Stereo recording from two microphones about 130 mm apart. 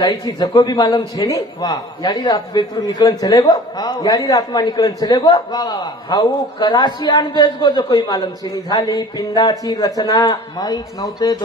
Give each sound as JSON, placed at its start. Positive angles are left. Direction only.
{"t": 0.0, "sound": "a man's voice", "side_deg": 30}